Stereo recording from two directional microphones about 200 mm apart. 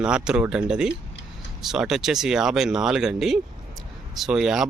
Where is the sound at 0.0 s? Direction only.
5° right (ahead or behind).